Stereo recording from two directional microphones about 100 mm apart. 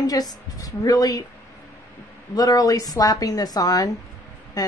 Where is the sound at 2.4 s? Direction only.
35° left (ahead or behind).